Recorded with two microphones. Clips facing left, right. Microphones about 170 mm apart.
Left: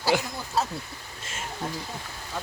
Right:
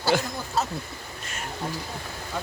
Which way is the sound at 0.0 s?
10° left (ahead or behind).